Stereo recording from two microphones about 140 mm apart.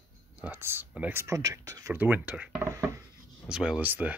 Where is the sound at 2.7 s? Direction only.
20° right (ahead or behind).